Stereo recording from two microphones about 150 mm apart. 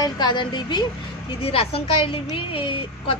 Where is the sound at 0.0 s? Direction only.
30° left (ahead or behind).